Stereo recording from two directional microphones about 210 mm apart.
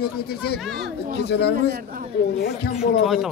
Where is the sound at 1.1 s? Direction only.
50° left (ahead or behind).